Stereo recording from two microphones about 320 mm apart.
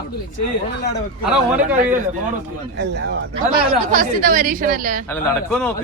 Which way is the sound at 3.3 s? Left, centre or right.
Right.